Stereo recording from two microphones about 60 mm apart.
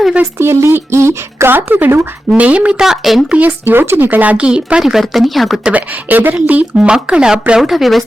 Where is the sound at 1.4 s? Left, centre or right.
Right.